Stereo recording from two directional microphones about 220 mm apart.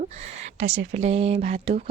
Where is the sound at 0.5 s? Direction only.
55° right (ahead or behind).